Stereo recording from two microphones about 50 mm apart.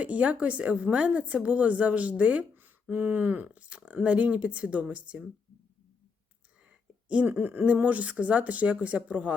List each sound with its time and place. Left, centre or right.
0.0 s speech: right
2.9 s speech: right
6.7 s speech: right